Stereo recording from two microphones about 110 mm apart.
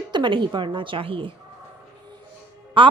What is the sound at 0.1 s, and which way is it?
A woman's voice, 45° right (ahead or behind).